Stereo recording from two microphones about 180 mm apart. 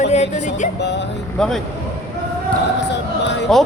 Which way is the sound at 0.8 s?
70° left (ahead or behind).